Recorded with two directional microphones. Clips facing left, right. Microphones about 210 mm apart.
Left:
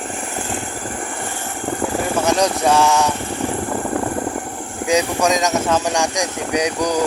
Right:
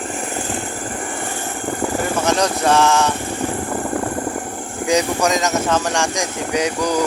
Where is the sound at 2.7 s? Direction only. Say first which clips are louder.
Right 2 dB; 10° left (ahead or behind).